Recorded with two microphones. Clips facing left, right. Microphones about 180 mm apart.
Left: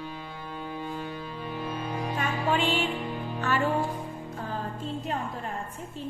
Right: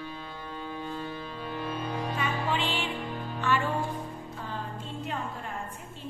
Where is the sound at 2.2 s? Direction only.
50° left (ahead or behind).